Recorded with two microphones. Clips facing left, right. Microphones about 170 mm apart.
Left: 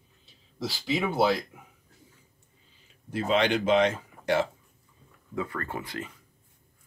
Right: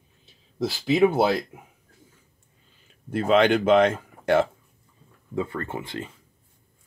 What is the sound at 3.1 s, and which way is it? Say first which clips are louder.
Speech: right 6 dB; 55° right (ahead or behind).